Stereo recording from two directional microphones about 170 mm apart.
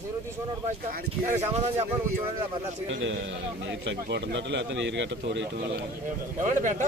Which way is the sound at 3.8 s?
90° right.